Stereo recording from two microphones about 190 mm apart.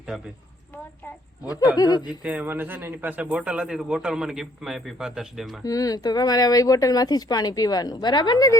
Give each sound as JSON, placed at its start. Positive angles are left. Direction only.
{"t": 1.7, "sound": "speech", "side_deg": 20}
{"t": 2.0, "sound": "a man's voice", "side_deg": -5}
{"t": 5.6, "sound": "speech", "side_deg": 20}